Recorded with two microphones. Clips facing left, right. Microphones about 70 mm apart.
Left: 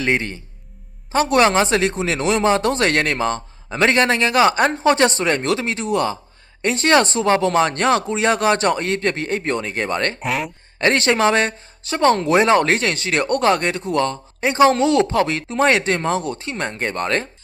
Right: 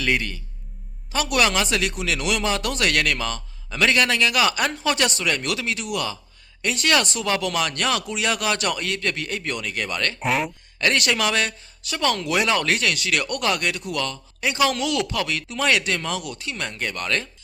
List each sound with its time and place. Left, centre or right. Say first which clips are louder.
0.0 s speech: left 3 dB; left
10.2 s speech: even; centre
10.8 s speech: left 5 dB; left